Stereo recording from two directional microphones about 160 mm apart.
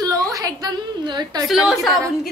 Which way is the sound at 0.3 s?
20° right (ahead or behind).